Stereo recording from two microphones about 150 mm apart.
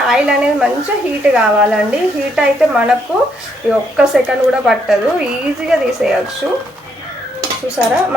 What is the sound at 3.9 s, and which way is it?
Speech, 5° right (ahead or behind).